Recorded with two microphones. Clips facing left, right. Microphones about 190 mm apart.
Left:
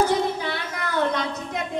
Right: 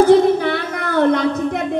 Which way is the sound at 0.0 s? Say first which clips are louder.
Right 11 dB; 55° right (ahead or behind).